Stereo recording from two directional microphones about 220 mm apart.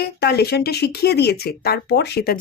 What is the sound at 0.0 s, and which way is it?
Speech, 50° left (ahead or behind).